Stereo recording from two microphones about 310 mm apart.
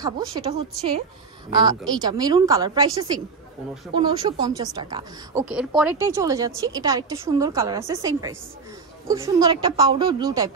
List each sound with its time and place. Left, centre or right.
0.0 s speech: centre